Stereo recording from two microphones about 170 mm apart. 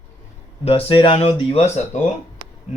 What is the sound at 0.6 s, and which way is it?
Speech, 30° left (ahead or behind).